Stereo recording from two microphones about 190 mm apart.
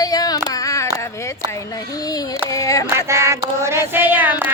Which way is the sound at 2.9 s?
15° right (ahead or behind).